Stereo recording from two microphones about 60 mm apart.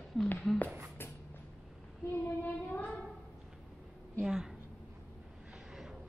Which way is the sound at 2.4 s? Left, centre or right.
Left.